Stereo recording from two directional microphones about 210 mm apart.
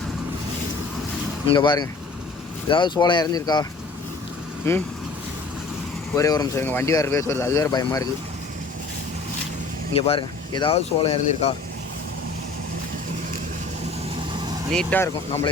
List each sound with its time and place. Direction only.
1.5 s speech: 20° left (ahead or behind)
6.1 s speech: 15° left (ahead or behind)
9.9 s speech: 25° left (ahead or behind)
14.7 s speech: 5° left (ahead or behind)